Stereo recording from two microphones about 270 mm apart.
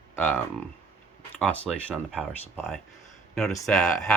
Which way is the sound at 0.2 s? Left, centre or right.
Centre.